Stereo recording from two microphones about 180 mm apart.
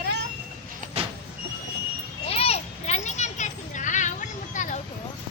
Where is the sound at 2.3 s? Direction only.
35° left (ahead or behind).